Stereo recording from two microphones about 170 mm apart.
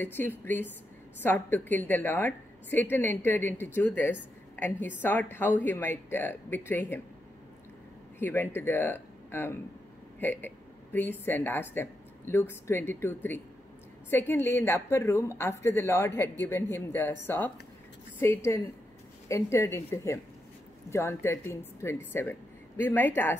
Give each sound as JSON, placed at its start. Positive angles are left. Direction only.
{"t": 0.0, "sound": "a woman's voice", "side_deg": 10}
{"t": 8.2, "sound": "a woman's voice", "side_deg": 10}